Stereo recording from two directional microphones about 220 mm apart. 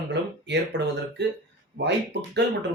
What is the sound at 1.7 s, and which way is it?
Speech, 50° right (ahead or behind).